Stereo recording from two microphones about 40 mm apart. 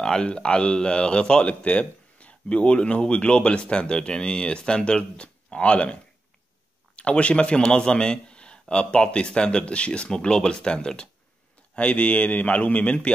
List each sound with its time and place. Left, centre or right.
0.0 s speech: centre
0.3 s speech: left
7.0 s speech: left
11.7 s a man's voice: left